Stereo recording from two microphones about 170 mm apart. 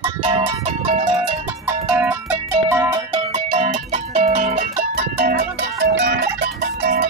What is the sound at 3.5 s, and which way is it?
Music, 45° right (ahead or behind).